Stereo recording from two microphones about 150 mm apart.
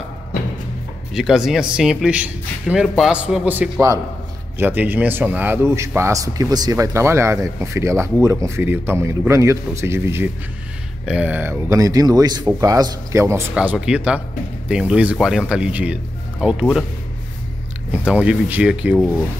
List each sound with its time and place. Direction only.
1.1 s a man's voice: 5° right (ahead or behind); by 13.4 s 20° right (ahead or behind)
13.6 s a man's voice: 5° right (ahead or behind)
18.0 s a man's voice: 10° right (ahead or behind)